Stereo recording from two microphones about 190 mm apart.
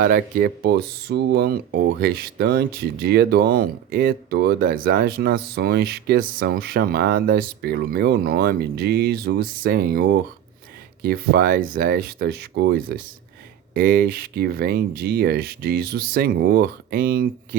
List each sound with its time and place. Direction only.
0.0 s speech: 50° right (ahead or behind)